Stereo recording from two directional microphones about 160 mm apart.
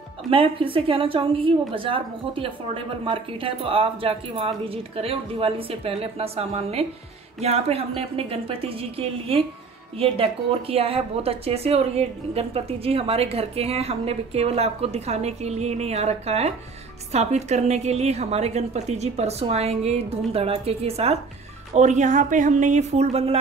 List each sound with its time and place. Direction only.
0.3 s a woman's voice: 35° right (ahead or behind)